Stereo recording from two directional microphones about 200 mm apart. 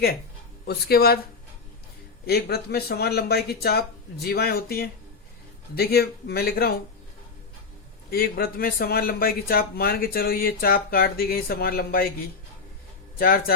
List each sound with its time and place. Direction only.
0.7 s speech: 50° left (ahead or behind)
2.2 s speech: 55° left (ahead or behind)
8.1 s speech: 50° left (ahead or behind)
13.1 s a man's voice: 50° left (ahead or behind)